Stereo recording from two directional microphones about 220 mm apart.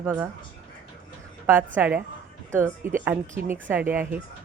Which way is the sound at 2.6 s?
35° right (ahead or behind).